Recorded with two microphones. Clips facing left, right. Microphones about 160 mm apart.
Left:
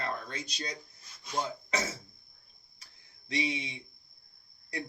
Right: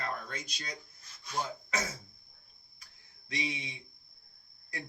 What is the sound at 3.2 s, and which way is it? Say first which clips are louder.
Speech: left 5 dB; 25° left (ahead or behind).